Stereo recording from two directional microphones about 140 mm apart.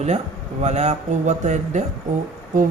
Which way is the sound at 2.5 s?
70° right (ahead or behind).